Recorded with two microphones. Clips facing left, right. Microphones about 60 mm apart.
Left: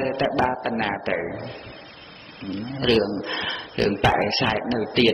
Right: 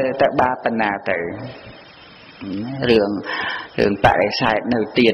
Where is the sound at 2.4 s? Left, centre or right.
Right.